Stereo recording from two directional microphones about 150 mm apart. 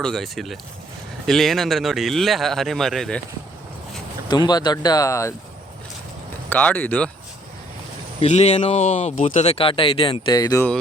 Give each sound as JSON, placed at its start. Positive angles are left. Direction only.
{"t": 0.0, "sound": "speech", "side_deg": 0}
{"t": 4.3, "sound": "speech", "side_deg": 30}
{"t": 6.5, "sound": "speech", "side_deg": 10}
{"t": 8.2, "sound": "speech", "side_deg": 45}
{"t": 10.3, "sound": "speech", "side_deg": 25}